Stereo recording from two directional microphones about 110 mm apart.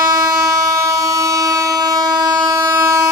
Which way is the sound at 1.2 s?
30° right (ahead or behind).